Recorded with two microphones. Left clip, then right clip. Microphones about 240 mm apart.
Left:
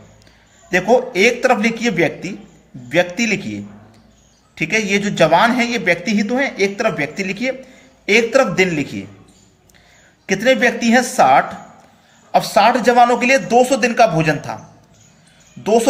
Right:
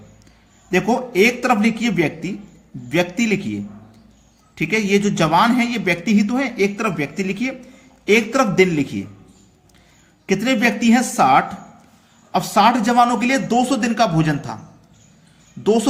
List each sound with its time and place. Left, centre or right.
0.7 s a man's voice: right
10.2 s a man's voice: right
12.5 s speech: right
15.6 s speech: centre